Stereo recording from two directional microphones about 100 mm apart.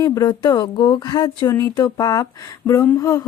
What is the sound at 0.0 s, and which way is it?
Speech, 40° left (ahead or behind).